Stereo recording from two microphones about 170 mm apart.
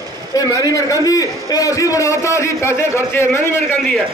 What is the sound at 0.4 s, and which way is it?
A man's voice, 20° left (ahead or behind).